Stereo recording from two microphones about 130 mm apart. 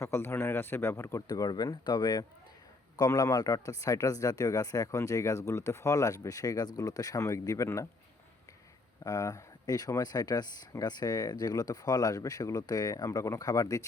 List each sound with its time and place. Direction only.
0.0 s speech: 20° left (ahead or behind)
9.0 s speech: 25° left (ahead or behind)